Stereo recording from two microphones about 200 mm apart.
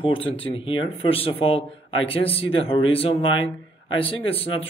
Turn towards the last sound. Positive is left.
turn(degrees=30)  # may be behind; listen again after turning